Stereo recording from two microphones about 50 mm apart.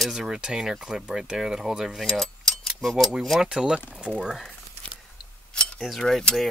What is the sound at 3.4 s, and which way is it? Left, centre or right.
Speech, centre.